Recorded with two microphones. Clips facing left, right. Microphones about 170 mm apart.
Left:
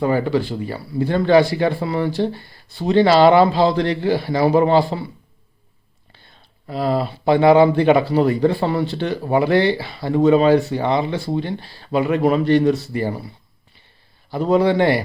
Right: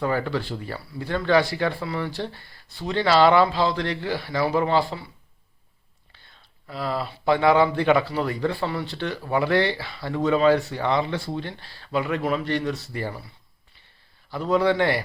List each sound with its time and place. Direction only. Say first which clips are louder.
0.0 s speech: left 7 dB; 10° left (ahead or behind)
0.9 s speech: left 7 dB; 25° left (ahead or behind)
6.7 s speech: left 8 dB; 25° left (ahead or behind)
12.5 s speech: left 11 dB; 15° left (ahead or behind)
14.3 s speech: left 5 dB; 25° left (ahead or behind)